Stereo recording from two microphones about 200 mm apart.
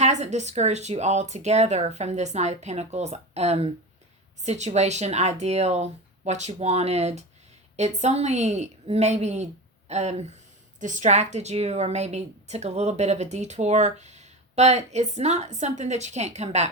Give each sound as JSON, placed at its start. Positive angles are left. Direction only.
{"t": 0.0, "sound": "a woman's voice", "side_deg": -35}